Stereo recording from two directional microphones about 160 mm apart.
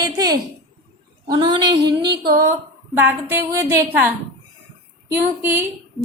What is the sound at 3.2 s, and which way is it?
Speech, 15° right (ahead or behind).